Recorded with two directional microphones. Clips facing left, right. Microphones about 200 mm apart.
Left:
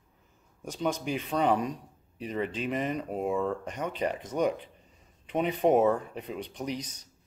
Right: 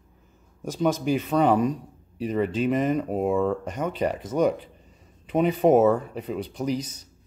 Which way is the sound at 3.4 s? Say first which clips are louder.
Right 6 dB; 5° right (ahead or behind).